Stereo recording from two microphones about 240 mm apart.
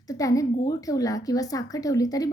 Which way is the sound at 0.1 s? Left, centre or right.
Centre.